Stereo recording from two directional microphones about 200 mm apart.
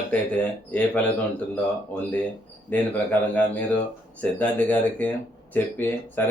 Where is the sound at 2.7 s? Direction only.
5° left (ahead or behind).